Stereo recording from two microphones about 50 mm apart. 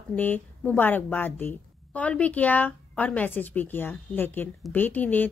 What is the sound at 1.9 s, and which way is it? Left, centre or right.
A woman's voice, left.